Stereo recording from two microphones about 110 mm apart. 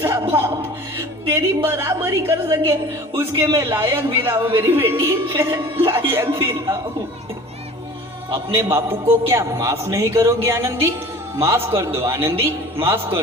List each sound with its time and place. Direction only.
0.0 s a sound: 20° right (ahead or behind)
1.3 s a man's voice: 25° right (ahead or behind)
8.5 s a man's voice: 25° right (ahead or behind)